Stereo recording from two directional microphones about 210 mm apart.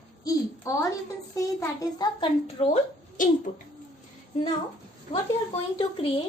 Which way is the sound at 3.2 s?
40° left (ahead or behind).